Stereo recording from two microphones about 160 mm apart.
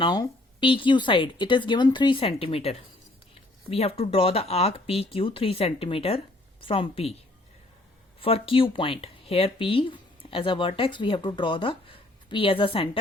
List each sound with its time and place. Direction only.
0.0 s speech: 30° left (ahead or behind)
8.2 s speech: 35° left (ahead or behind)